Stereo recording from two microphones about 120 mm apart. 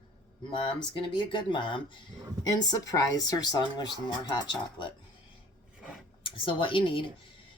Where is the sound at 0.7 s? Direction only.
40° left (ahead or behind).